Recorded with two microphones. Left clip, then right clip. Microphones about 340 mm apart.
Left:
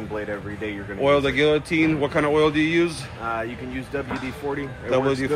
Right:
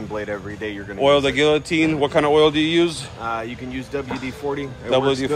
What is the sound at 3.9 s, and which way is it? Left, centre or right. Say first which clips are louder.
Speech: right 2 dB; right.